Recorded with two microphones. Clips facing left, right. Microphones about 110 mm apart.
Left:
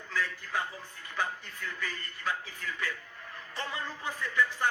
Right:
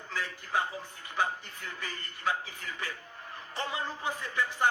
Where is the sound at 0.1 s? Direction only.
20° right (ahead or behind).